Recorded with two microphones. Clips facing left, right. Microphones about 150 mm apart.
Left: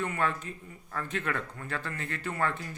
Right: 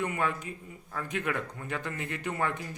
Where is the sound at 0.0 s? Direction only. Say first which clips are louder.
Even; 15° right (ahead or behind).